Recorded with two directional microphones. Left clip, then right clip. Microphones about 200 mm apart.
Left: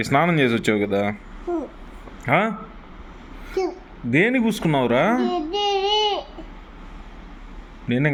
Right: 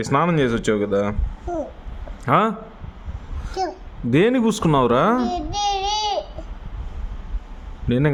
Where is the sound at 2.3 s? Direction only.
25° right (ahead or behind).